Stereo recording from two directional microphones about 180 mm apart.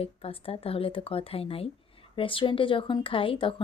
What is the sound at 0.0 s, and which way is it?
Speech, 30° left (ahead or behind).